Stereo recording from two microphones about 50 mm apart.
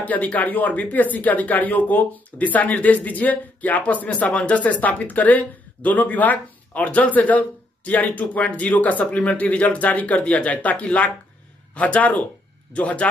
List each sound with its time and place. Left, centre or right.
0.0 s speech: left